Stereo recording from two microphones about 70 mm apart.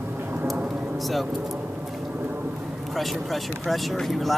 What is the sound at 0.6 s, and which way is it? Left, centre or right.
Vehicle, right.